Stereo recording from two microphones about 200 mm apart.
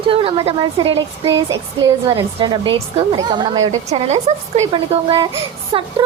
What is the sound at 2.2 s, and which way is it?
A woman's voice, 25° right (ahead or behind).